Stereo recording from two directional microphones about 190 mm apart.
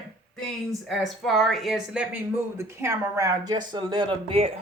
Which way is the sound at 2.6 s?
15° right (ahead or behind).